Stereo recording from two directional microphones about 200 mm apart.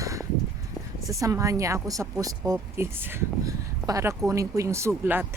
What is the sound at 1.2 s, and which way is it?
Speech, 15° right (ahead or behind).